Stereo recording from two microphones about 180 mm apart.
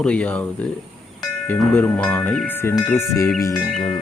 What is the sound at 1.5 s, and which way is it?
Speech, 5° left (ahead or behind).